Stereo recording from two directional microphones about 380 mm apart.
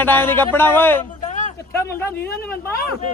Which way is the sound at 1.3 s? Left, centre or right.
Centre.